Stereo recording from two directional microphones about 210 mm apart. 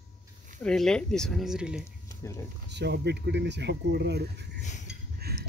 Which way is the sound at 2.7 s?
50° right (ahead or behind).